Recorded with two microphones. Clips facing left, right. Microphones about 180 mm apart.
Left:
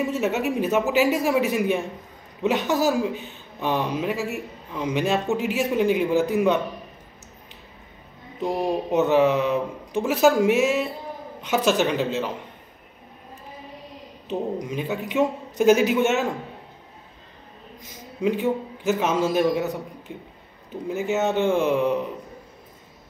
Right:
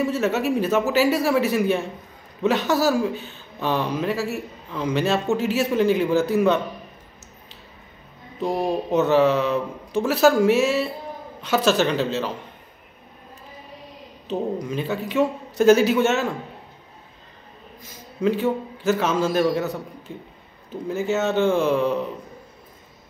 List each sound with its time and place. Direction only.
0.0 s speech: 15° left (ahead or behind)
8.9 s speech: 15° left (ahead or behind)
14.6 s speech: 15° left (ahead or behind)
17.8 s a man's voice: 15° left (ahead or behind)
20.9 s speech: 15° left (ahead or behind)